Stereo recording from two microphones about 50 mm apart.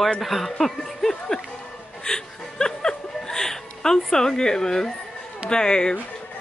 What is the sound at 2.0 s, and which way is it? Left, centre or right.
Chuckle, centre.